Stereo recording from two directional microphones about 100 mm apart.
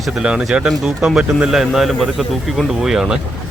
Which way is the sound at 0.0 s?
5° right (ahead or behind).